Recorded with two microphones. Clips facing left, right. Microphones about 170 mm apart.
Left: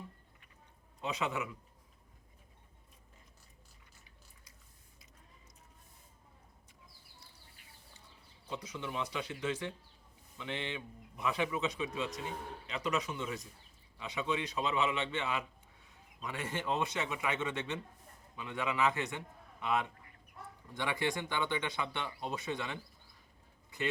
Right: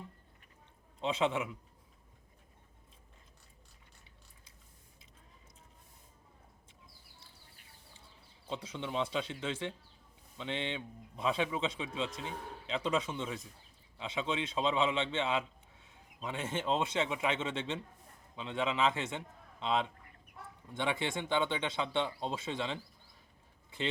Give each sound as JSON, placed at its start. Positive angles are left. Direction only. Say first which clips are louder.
{"t": 1.0, "sound": "speech", "louder": "right 4 dB", "side_deg": -25}
{"t": 8.4, "sound": "speech", "louder": "right 2 dB", "side_deg": -25}